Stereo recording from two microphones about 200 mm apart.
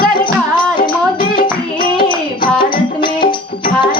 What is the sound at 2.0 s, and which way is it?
Music, 25° left (ahead or behind).